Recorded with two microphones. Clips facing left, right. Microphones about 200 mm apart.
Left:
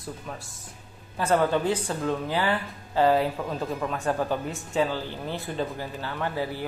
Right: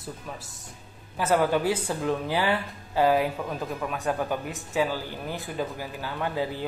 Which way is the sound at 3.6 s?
Centre (ahead or behind).